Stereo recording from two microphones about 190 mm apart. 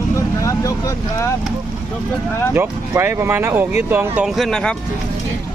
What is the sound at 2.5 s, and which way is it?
Speech, 10° right (ahead or behind).